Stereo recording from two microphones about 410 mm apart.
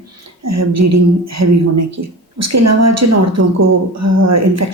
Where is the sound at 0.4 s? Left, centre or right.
Right.